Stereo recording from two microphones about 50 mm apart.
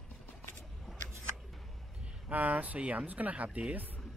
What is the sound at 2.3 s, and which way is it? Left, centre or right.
Speech, right.